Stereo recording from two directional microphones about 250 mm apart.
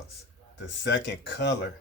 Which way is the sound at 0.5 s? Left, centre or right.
Left.